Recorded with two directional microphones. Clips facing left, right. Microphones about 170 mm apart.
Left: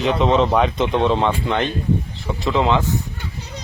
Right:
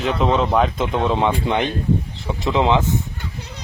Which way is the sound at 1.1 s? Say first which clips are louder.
Even; 10° right (ahead or behind).